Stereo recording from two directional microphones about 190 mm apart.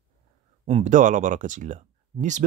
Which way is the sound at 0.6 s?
35° right (ahead or behind).